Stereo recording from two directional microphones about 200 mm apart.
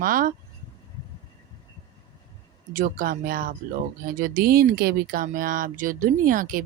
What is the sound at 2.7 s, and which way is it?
Speech, 45° right (ahead or behind).